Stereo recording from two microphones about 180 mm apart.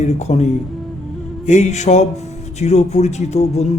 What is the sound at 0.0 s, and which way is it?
Speech, 40° left (ahead or behind).